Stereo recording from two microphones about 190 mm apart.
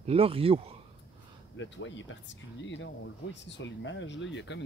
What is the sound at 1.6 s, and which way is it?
Speech, 80° left.